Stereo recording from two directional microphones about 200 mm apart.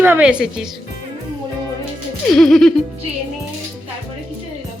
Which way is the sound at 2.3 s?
Centre (ahead or behind).